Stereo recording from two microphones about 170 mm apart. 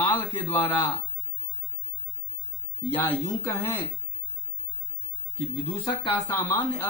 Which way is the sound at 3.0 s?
15° left (ahead or behind).